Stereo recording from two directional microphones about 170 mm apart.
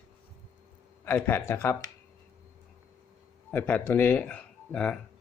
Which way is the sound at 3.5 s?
10° left (ahead or behind).